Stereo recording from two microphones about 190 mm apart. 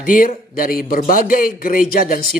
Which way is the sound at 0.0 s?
45° left (ahead or behind).